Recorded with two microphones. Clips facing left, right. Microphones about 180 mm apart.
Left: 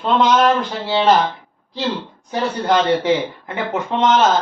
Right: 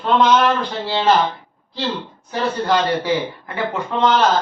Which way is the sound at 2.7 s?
20° left (ahead or behind).